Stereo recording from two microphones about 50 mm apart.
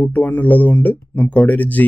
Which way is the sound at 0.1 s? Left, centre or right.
Left.